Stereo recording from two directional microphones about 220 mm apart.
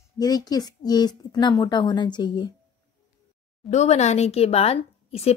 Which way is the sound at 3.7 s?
30° left (ahead or behind).